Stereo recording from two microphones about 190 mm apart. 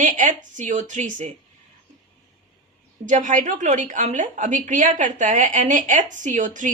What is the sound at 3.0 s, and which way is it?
Speech, 40° right (ahead or behind).